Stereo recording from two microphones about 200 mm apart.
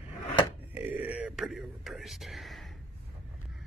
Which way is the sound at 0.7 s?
10° right (ahead or behind).